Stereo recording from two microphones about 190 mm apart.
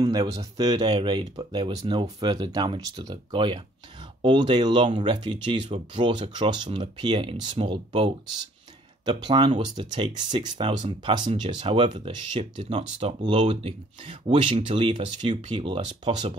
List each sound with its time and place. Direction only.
0.0 s speech: 20° right (ahead or behind)